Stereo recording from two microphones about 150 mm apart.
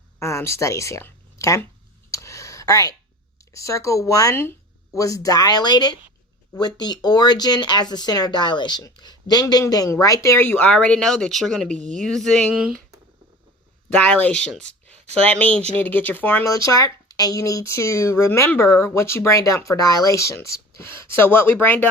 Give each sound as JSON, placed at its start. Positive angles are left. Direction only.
{"t": 0.2, "sound": "speech", "side_deg": 20}
{"t": 2.0, "sound": "a sound", "side_deg": 20}
{"t": 3.5, "sound": "speech", "side_deg": 20}
{"t": 14.0, "sound": "speech", "side_deg": 10}
{"t": 15.0, "sound": "speech", "side_deg": -45}
{"t": 15.3, "sound": "speech", "side_deg": 10}